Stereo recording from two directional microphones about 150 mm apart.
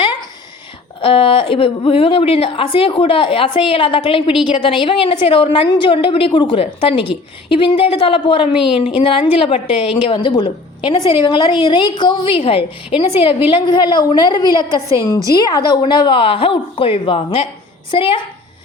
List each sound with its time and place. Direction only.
1.0 s a woman's voice: 40° left (ahead or behind)